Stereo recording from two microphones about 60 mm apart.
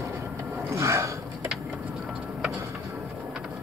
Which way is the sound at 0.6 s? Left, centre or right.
Right.